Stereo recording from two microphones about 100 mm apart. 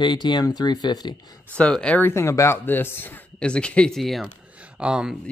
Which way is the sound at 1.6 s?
10° left (ahead or behind).